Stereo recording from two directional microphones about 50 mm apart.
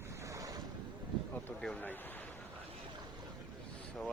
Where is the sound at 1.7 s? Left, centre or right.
Left.